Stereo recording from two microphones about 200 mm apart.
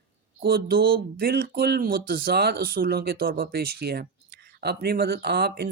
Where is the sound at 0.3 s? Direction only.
50° right (ahead or behind).